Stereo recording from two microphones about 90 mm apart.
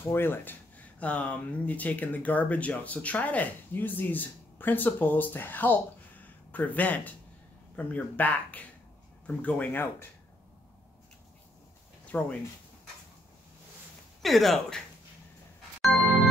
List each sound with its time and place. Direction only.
0.0 s speech: 25° left (ahead or behind)
12.1 s speech: 15° left (ahead or behind)
14.2 s speech: centre (ahead or behind)